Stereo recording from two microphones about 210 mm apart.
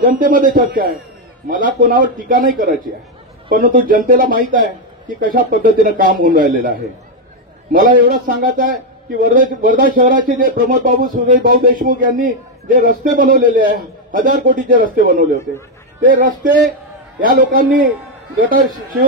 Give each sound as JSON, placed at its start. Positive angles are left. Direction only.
{"t": 0.0, "sound": "a man's voice", "side_deg": -40}